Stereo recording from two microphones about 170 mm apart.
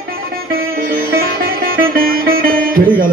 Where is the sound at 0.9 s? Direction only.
60° right (ahead or behind).